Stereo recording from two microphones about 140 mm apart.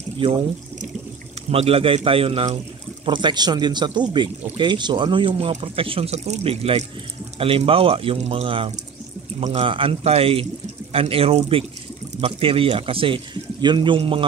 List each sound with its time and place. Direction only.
1.5 s speech: 45° right (ahead or behind)
3.1 s speech: 35° right (ahead or behind)